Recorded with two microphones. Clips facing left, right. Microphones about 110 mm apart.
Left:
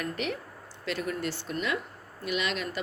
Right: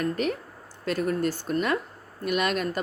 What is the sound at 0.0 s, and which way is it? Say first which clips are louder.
Speech: right 6 dB; 40° right (ahead or behind).